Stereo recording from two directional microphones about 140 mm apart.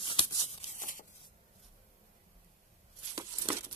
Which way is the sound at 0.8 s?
70° left (ahead or behind).